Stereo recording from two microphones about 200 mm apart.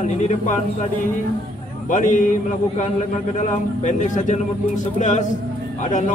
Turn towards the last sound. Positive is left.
turn(degrees=40)  # may be behind; listen again after turning